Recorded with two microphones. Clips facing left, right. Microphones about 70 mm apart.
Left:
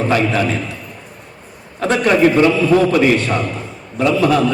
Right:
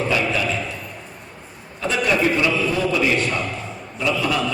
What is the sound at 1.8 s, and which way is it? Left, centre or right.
A man's voice, left.